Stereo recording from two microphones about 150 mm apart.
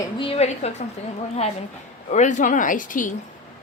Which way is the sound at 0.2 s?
40° left (ahead or behind).